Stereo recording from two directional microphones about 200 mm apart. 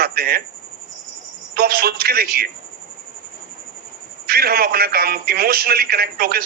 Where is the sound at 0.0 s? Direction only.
50° right (ahead or behind).